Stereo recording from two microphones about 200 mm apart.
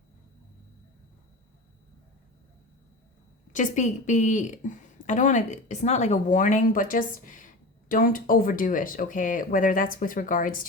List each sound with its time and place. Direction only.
3.5 s a woman's voice: 40° left (ahead or behind)